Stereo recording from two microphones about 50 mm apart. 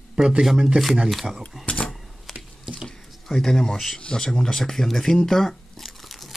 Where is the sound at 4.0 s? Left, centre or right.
Centre.